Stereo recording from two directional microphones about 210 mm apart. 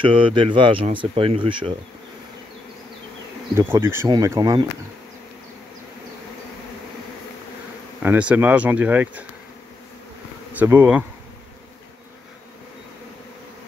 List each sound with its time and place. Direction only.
0.0 s speech: 25° right (ahead or behind)
3.5 s speech: 10° right (ahead or behind)
8.0 s speech: 5° right (ahead or behind)
10.5 s bee: 10° right (ahead or behind)